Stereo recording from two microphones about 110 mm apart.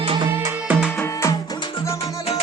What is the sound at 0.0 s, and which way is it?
Music, 50° right (ahead or behind).